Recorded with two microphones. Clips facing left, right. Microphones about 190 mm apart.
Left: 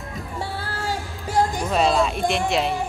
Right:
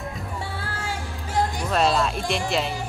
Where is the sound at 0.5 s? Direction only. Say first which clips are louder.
Left 3 dB; 30° left (ahead or behind).